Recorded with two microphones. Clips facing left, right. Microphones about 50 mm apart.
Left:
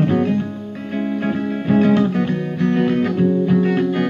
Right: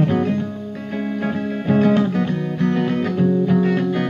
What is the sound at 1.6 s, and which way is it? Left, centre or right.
Music, centre.